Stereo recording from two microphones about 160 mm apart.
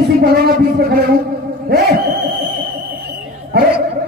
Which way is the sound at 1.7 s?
75° right (ahead or behind).